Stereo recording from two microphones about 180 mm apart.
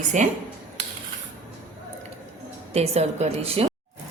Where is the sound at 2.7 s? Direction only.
35° right (ahead or behind).